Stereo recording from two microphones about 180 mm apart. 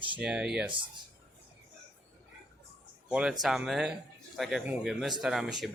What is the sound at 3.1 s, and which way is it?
Speech, 5° right (ahead or behind).